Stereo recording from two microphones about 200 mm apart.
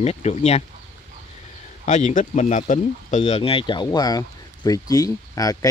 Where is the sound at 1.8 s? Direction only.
35° left (ahead or behind); by 5.5 s 15° left (ahead or behind).